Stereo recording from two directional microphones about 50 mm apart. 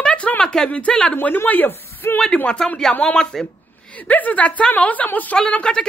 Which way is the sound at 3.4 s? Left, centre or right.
Left.